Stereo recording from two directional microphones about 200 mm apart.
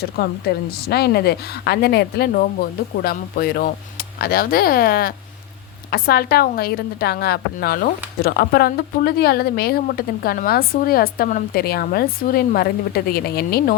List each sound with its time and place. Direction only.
0.0 s a woman's voice: 50° left (ahead or behind)